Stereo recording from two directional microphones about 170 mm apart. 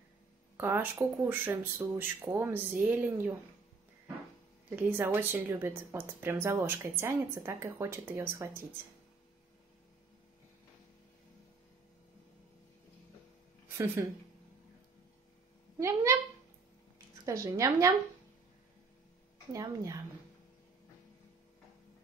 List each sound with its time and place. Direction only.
0.6 s speech: 15° right (ahead or behind)
4.6 s speech: 10° right (ahead or behind)
15.8 s speech: 20° right (ahead or behind)
17.2 s a woman's voice: 20° right (ahead or behind)
19.5 s a woman's voice: 20° right (ahead or behind)